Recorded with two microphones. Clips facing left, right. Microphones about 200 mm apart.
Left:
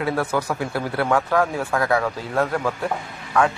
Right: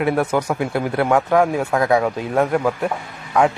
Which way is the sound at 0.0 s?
20° right (ahead or behind).